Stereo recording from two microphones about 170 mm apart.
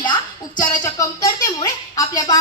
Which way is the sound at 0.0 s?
25° left (ahead or behind).